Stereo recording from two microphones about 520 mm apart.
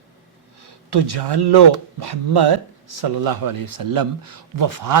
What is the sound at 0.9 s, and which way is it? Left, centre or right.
Speech, right.